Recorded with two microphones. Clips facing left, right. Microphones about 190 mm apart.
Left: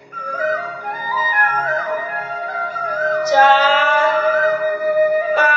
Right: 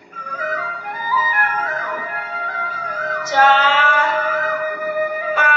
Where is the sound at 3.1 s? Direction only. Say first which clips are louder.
Left 2 dB; 35° left (ahead or behind).